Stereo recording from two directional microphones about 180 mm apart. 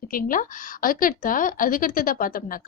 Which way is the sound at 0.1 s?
50° left (ahead or behind).